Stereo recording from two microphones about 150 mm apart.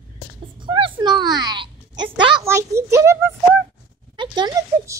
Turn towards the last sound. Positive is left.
turn(degrees=-25)  # may be behind; listen again after turning